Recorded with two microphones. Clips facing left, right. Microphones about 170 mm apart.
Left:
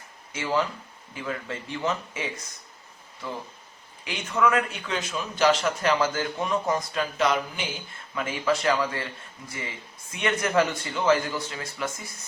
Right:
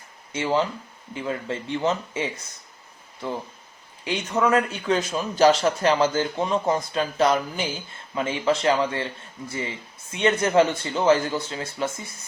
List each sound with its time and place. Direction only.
0.3 s speech: 25° right (ahead or behind)
4.0 s a man's voice: 30° right (ahead or behind)
8.1 s speech: 25° right (ahead or behind)
10.1 s speech: 30° right (ahead or behind)